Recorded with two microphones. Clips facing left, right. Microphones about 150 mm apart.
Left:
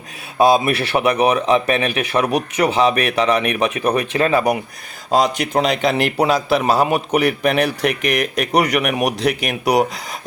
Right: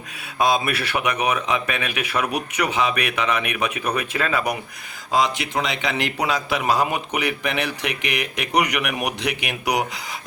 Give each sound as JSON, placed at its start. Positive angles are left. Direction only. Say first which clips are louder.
{"t": 0.3, "sound": "a man's voice", "louder": "left 6 dB", "side_deg": 30}